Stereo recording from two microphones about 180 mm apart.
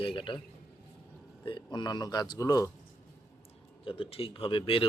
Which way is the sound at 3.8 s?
30° left (ahead or behind).